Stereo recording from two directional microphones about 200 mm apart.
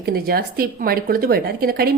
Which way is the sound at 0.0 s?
50° right (ahead or behind).